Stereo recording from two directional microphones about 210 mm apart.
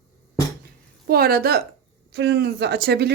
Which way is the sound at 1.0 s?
45° right (ahead or behind).